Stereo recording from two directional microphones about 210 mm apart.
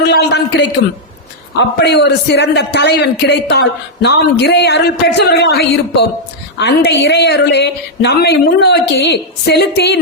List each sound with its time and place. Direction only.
0.1 s a man's voice: 55° left (ahead or behind)